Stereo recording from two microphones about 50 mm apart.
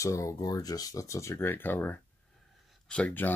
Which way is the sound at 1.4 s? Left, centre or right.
Left.